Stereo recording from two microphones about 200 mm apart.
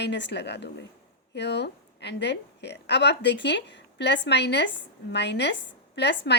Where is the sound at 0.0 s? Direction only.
60° left (ahead or behind).